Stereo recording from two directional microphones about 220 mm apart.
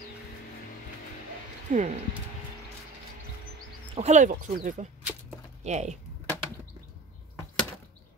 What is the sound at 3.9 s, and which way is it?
Speech, 30° right (ahead or behind).